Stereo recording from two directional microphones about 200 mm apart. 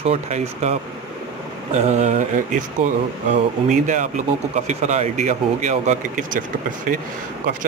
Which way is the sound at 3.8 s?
40° right (ahead or behind).